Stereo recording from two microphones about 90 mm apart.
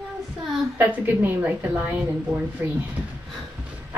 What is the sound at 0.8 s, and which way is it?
Speech, 20° right (ahead or behind).